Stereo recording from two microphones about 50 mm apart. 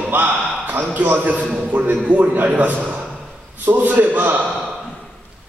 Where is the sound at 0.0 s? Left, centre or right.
Right.